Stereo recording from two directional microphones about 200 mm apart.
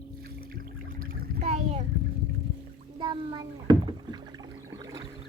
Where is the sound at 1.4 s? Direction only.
35° right (ahead or behind).